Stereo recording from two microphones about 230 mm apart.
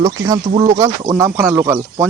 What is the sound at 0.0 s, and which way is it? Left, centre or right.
Speech, centre.